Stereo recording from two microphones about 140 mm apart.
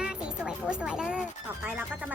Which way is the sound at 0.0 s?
5° right (ahead or behind).